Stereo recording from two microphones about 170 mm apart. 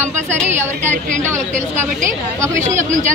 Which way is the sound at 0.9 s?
45° right (ahead or behind).